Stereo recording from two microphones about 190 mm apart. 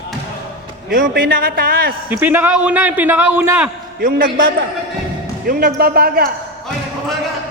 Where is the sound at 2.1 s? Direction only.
10° right (ahead or behind).